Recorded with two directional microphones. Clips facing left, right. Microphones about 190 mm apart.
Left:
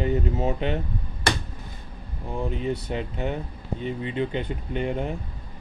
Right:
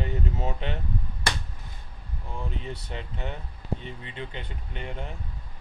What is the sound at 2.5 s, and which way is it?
Speech, 15° left (ahead or behind).